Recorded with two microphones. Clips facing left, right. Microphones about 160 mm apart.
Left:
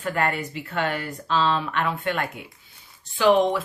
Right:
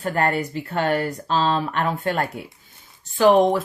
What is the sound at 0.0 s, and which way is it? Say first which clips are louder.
A woman's voice: right 3 dB; 40° right (ahead or behind).